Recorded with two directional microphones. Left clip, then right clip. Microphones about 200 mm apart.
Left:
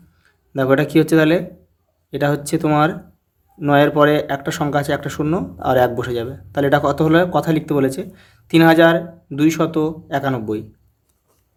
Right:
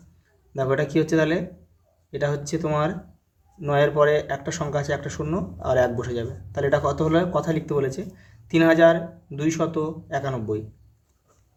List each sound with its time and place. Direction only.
0.5 s speech: 50° left (ahead or behind)